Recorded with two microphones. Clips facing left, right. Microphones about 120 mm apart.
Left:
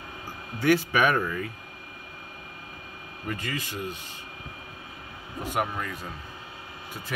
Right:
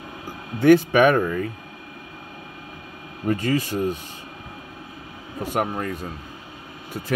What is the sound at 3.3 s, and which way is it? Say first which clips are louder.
Speech: right 11 dB; 40° right (ahead or behind).